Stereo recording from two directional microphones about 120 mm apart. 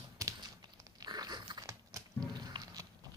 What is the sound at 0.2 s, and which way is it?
Typing, 25° right (ahead or behind).